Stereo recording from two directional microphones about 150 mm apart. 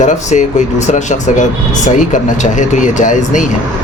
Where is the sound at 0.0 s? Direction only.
55° left (ahead or behind).